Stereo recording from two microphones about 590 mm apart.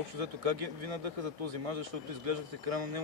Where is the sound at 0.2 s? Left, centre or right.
Right.